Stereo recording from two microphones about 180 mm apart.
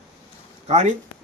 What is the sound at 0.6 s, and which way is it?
Speech, 40° right (ahead or behind).